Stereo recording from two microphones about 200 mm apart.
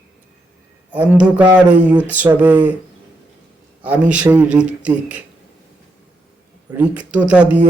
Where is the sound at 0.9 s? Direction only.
5° right (ahead or behind).